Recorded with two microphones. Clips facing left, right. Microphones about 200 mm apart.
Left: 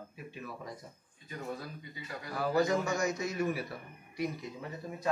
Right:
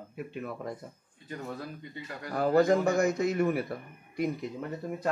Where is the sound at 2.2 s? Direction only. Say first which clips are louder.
Right 6 dB; 55° right (ahead or behind).